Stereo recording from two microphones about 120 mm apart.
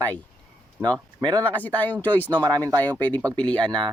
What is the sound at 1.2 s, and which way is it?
Speech, 35° right (ahead or behind).